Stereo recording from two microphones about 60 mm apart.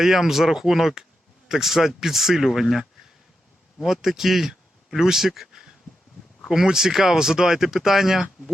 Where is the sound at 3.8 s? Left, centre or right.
Centre.